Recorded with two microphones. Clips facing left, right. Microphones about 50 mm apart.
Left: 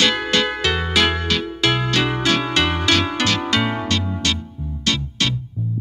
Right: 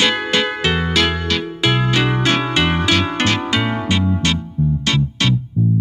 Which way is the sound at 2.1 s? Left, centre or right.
Right.